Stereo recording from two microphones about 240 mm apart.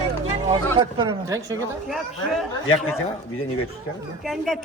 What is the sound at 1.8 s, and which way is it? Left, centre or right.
Speech, centre.